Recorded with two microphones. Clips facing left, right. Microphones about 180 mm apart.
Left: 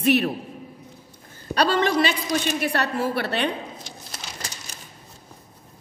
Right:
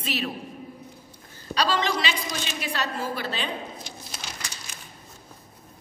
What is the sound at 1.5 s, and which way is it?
A man's voice, 55° left (ahead or behind).